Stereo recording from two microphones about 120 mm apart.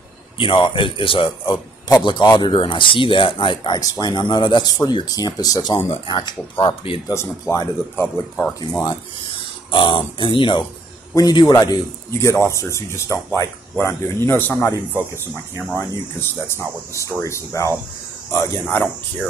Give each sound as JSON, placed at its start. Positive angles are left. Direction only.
{"t": 0.4, "sound": "speech", "side_deg": 45}
{"t": 3.8, "sound": "speech", "side_deg": 30}
{"t": 7.1, "sound": "a man's voice", "side_deg": 25}
{"t": 8.8, "sound": "speech", "side_deg": 45}
{"t": 11.1, "sound": "a man's voice", "side_deg": 30}
{"t": 18.7, "sound": "speech", "side_deg": 15}